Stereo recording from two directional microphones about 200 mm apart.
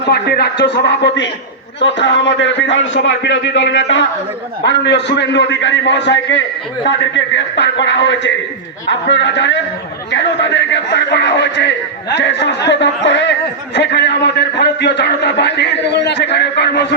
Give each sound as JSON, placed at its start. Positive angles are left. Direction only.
{"t": 0.0, "sound": "a man's voice", "side_deg": 55}